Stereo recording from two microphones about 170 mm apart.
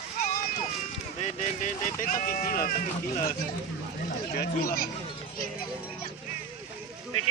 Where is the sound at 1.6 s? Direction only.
50° left (ahead or behind).